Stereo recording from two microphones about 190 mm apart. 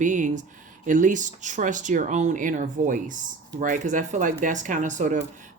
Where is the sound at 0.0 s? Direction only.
40° right (ahead or behind).